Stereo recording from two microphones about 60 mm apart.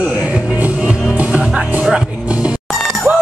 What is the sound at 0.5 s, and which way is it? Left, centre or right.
Music, right.